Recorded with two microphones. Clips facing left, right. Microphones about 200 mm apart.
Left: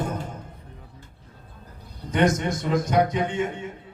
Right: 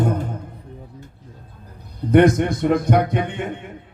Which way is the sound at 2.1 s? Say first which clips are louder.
Right 8 dB; 60° right (ahead or behind).